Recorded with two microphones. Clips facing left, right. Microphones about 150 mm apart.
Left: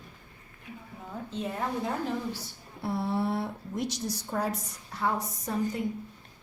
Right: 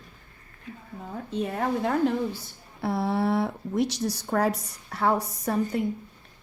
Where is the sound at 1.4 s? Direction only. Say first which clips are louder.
Right 5 dB; 65° right (ahead or behind).